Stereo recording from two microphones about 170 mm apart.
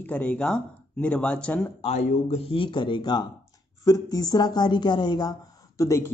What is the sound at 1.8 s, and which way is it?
A man's voice, 40° left (ahead or behind).